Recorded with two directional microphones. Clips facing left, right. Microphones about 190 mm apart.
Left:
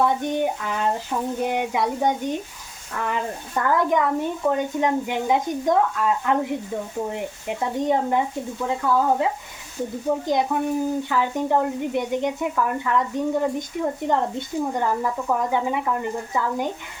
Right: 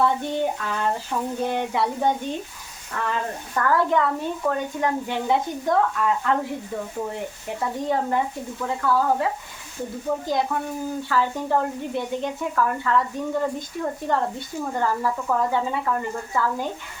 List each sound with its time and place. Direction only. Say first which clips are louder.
0.0 s speech: left 1 dB; 15° left (ahead or behind)